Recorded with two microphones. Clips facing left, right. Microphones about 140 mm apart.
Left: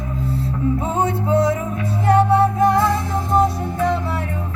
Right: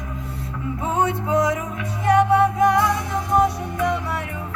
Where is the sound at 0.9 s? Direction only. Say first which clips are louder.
Right 1 dB; 30° left (ahead or behind).